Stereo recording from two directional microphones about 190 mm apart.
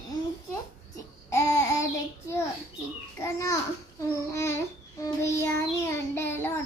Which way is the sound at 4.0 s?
15° left (ahead or behind).